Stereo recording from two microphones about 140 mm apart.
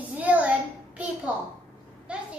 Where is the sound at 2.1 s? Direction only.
10° right (ahead or behind).